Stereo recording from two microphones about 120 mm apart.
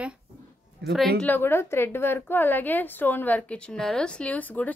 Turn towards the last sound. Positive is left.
turn(degrees=15)  # may be behind; listen again after turning